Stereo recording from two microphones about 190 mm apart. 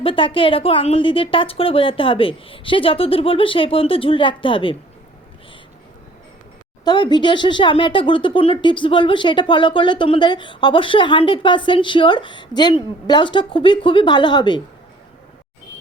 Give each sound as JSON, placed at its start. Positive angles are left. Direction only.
{"t": 0.0, "sound": "speech", "side_deg": 30}
{"t": 6.8, "sound": "speech", "side_deg": 20}